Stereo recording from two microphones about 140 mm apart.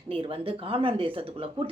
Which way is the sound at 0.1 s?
40° right (ahead or behind).